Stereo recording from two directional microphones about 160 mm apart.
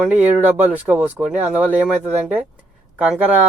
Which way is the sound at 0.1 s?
10° right (ahead or behind).